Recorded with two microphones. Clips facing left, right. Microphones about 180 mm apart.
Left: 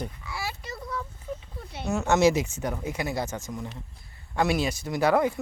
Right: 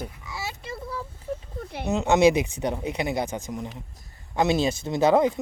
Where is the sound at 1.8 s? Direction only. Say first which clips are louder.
Right 3 dB; 20° right (ahead or behind).